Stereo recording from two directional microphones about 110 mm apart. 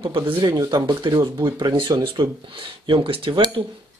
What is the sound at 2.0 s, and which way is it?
Speech, 50° right (ahead or behind).